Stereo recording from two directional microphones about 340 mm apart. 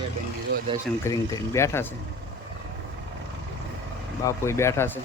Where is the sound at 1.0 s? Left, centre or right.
Centre.